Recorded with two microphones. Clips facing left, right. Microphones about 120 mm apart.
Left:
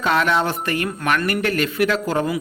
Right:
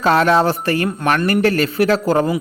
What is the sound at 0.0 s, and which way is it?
Speech, 35° right (ahead or behind).